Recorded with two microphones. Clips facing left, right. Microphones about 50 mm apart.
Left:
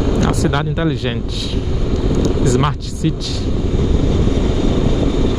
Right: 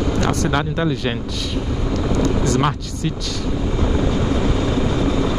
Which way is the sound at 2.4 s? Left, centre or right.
Centre.